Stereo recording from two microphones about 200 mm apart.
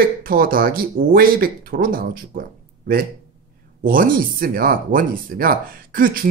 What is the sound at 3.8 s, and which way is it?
Speech, 45° right (ahead or behind).